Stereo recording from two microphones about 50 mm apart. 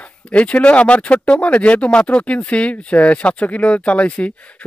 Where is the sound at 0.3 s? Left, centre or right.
Left.